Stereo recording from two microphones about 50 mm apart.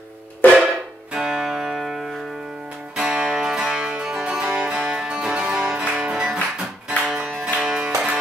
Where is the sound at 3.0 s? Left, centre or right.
Centre.